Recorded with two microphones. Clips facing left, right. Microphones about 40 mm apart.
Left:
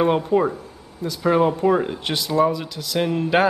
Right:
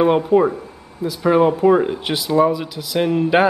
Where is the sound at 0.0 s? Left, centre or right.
Centre.